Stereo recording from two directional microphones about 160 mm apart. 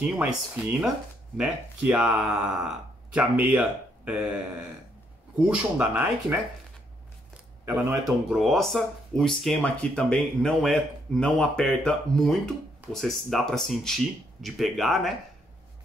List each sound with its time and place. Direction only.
0.0 s speech: 10° right (ahead or behind)
7.6 s speech: 15° right (ahead or behind)
8.3 s speech: centre (ahead or behind)